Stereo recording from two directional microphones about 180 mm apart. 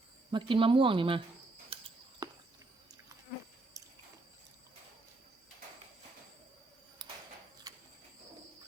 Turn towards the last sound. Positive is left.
turn(degrees=-20)  # may be behind; listen again after turning